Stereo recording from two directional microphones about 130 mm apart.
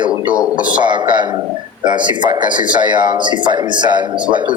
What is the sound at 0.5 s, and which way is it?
Speech, 10° right (ahead or behind).